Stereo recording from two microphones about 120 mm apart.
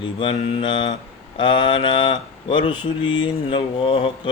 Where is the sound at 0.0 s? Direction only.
45° left (ahead or behind).